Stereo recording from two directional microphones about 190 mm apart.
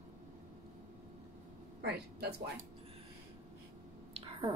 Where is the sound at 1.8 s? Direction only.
60° right (ahead or behind).